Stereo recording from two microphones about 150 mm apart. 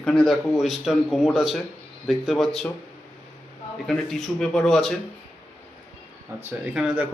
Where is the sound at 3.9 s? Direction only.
Centre (ahead or behind).